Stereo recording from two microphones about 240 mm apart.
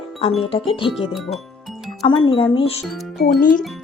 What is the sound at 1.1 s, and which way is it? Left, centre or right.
Music, centre.